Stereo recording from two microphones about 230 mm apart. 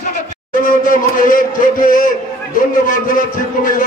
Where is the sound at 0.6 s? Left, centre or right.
Left.